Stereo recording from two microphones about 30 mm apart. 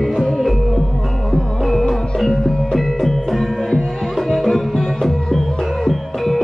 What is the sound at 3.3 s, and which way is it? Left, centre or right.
Music, centre.